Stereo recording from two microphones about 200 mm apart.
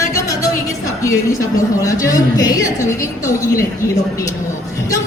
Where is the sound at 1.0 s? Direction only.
15° left (ahead or behind).